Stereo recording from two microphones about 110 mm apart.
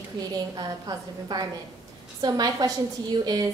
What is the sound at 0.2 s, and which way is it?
A woman's voice, 35° right (ahead or behind).